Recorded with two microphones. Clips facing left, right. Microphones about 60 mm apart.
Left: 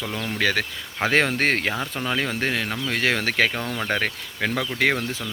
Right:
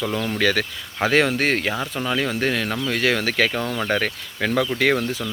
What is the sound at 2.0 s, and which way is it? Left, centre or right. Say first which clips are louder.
Speech: right 3 dB; left.